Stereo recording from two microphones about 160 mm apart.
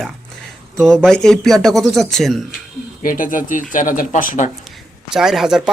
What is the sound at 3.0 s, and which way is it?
Speech, 60° left (ahead or behind).